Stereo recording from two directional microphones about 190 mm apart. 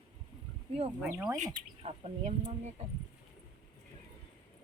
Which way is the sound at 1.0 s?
5° right (ahead or behind).